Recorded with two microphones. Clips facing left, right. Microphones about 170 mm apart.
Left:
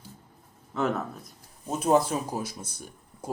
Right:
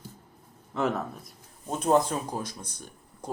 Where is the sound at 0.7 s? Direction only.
Centre (ahead or behind).